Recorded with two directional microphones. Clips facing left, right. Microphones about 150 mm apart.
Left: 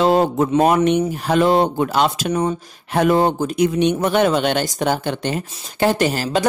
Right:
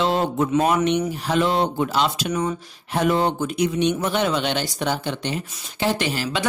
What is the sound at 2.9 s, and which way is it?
Speech, 50° left (ahead or behind).